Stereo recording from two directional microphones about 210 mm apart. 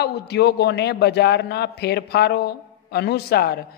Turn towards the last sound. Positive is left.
turn(degrees=50)  # may be behind; listen again after turning